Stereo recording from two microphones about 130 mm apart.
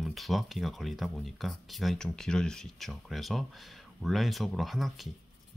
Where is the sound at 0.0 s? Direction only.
Centre (ahead or behind).